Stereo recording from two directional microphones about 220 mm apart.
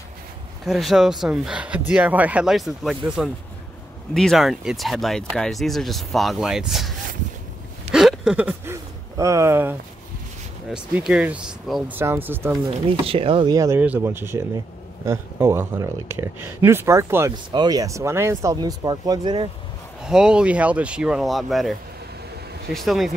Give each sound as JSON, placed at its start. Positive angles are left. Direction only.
{"t": 0.7, "sound": "speech", "side_deg": 0}
{"t": 4.1, "sound": "speech", "side_deg": 0}
{"t": 7.9, "sound": "a sound", "side_deg": -5}
{"t": 10.7, "sound": "speech", "side_deg": -5}
{"t": 13.0, "sound": "speech", "side_deg": -25}
{"t": 20.0, "sound": "speech", "side_deg": -5}